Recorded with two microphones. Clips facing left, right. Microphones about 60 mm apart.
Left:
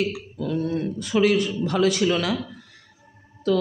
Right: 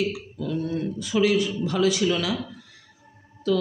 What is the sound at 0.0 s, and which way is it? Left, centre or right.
Speech, left.